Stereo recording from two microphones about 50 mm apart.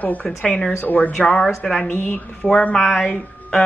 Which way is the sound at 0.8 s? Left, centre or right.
Left.